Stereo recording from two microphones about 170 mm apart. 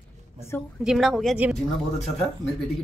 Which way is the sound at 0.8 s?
Centre (ahead or behind).